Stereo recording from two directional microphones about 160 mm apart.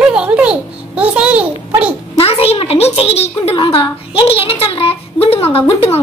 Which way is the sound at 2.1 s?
35° left (ahead or behind).